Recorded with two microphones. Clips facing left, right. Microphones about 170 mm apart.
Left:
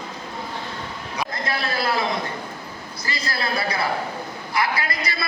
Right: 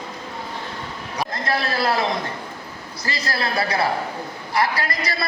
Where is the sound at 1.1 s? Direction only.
40° right (ahead or behind).